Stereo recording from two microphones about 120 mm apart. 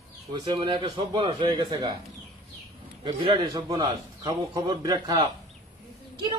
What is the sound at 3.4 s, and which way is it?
A man's voice, 35° right (ahead or behind).